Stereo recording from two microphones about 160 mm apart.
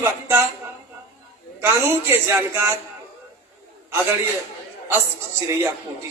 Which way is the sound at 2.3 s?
15° right (ahead or behind).